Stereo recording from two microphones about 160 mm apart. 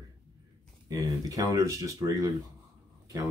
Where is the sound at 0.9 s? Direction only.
20° right (ahead or behind).